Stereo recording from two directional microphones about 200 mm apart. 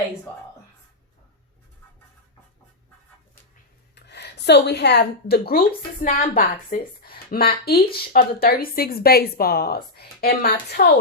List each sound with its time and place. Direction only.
3.9 s a woman's voice: 55° left (ahead or behind)